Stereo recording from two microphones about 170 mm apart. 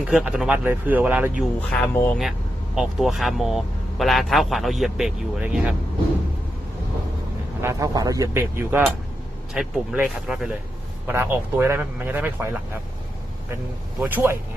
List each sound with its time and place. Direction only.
0.0 s speech: 5° right (ahead or behind)
1.4 s speech: 5° left (ahead or behind)
2.7 s speech: centre (ahead or behind)
7.6 s speech: 20° right (ahead or behind)
9.5 s speech: 5° right (ahead or behind)
14.0 s speech: 15° right (ahead or behind)